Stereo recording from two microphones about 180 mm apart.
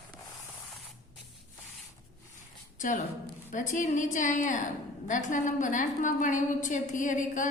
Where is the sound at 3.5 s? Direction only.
45° left (ahead or behind).